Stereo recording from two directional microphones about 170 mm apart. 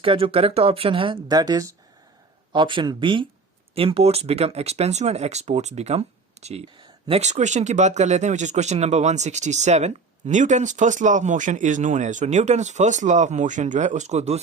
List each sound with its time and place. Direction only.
0.0 s speech: 35° right (ahead or behind)